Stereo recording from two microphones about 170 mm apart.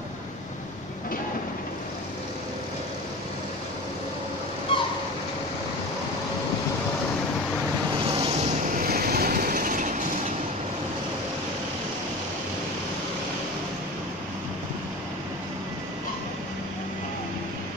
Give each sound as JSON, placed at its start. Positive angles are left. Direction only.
{"t": 4.7, "sound": "a sound", "side_deg": 30}
{"t": 8.1, "sound": "vehicle", "side_deg": -30}
{"t": 8.6, "sound": "train", "side_deg": -60}